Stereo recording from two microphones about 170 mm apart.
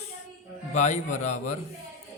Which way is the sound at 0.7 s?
45° left (ahead or behind).